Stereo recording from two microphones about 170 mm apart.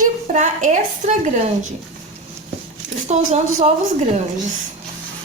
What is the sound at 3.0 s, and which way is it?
Speech, 40° right (ahead or behind).